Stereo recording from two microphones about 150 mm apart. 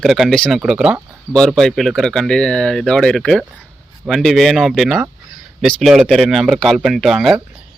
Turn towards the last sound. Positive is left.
turn(degrees=0)  # may be behind; listen again after turning